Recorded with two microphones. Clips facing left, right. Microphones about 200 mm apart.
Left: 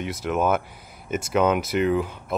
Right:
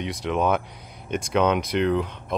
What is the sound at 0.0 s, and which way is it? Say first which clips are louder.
Speech: even; 5° left (ahead or behind).